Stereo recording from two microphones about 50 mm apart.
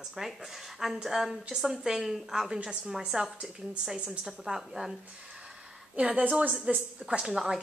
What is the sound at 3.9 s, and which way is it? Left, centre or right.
Speech, right.